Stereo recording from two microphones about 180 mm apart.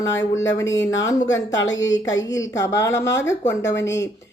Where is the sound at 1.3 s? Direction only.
20° left (ahead or behind).